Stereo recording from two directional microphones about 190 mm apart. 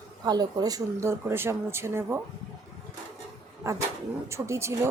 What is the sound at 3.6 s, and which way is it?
A woman's voice, 15° right (ahead or behind).